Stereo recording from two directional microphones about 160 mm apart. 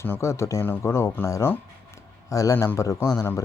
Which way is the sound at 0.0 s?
15° left (ahead or behind).